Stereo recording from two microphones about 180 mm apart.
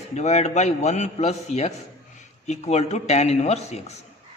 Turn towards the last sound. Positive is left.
turn(degrees=35)  # may be behind; listen again after turning